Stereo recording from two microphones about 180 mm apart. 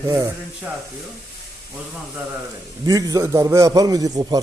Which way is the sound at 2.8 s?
20° right (ahead or behind).